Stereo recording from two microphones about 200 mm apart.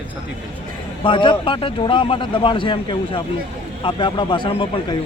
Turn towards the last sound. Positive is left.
turn(degrees=25)  # may be behind; listen again after turning